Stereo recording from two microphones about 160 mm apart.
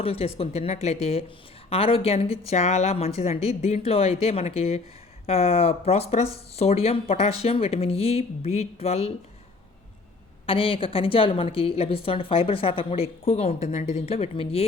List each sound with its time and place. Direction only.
0.0 s a woman's voice: 35° left (ahead or behind)
10.4 s a woman's voice: 35° left (ahead or behind)